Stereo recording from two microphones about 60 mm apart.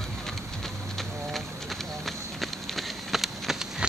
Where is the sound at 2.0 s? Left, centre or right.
Centre.